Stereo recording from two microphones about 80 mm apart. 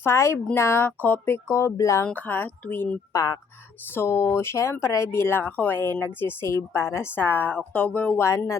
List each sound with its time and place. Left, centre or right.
0.0 s speech: left
2.1 s a woman's voice: left
3.1 s speech: left
3.9 s a woman's voice: left